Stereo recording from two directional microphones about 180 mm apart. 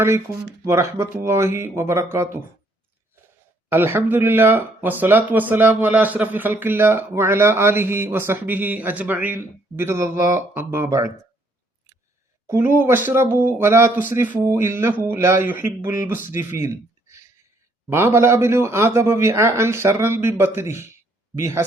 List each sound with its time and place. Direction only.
0.6 s speech: 15° right (ahead or behind)
3.7 s speech: 10° right (ahead or behind)
12.5 s speech: 15° right (ahead or behind)